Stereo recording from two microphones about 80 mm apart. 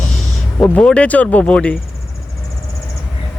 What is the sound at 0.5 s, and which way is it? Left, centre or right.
Speech, centre.